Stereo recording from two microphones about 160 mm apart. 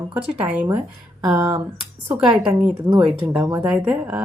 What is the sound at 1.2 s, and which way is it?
Speech, 20° right (ahead or behind).